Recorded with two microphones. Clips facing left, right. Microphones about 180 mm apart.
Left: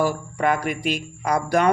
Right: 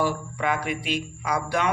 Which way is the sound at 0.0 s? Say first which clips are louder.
Left 4 dB; 45° left (ahead or behind).